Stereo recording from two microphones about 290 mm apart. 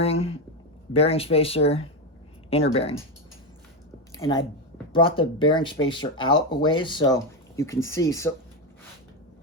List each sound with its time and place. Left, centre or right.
0.0 s speech: centre
4.2 s speech: centre